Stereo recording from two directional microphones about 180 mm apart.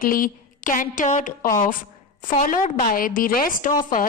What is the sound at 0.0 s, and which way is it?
A woman's voice, 50° left (ahead or behind).